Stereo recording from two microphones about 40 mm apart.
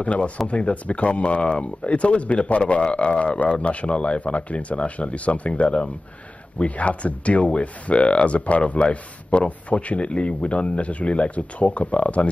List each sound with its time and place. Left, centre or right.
0.0 s speech: left